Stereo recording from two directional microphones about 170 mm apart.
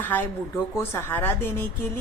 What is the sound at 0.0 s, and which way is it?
Speech, 10° left (ahead or behind).